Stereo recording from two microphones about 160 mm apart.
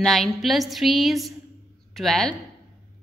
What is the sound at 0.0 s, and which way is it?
A woman's voice, centre (ahead or behind).